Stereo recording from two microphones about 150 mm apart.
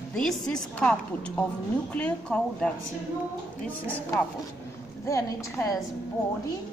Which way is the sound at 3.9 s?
10° left (ahead or behind).